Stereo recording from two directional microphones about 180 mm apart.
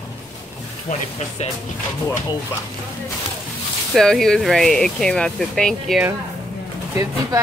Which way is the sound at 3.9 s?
Centre (ahead or behind).